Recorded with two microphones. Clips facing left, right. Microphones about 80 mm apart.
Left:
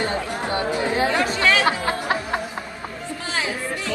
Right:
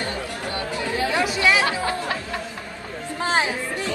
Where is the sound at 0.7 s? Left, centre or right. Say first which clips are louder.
Left 2 dB; left.